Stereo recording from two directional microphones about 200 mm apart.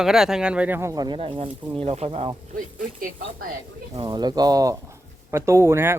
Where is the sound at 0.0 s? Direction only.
Centre (ahead or behind); by 2.3 s 30° right (ahead or behind).